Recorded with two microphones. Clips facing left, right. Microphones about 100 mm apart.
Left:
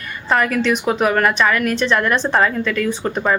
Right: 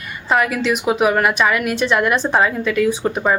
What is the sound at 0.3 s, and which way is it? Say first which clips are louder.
Speech: even; 5° right (ahead or behind).